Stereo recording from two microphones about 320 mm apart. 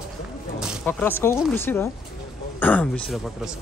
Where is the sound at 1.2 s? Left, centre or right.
Centre.